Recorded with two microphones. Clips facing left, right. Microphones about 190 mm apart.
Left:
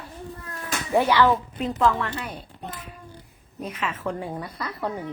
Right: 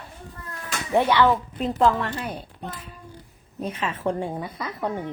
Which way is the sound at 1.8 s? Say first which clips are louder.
Right 2 dB; 30° right (ahead or behind).